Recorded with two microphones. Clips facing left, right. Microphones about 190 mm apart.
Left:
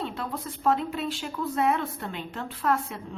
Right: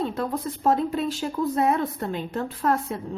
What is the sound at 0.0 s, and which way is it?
Speech, 40° right (ahead or behind).